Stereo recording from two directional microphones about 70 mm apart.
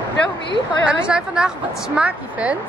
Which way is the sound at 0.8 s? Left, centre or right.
Centre.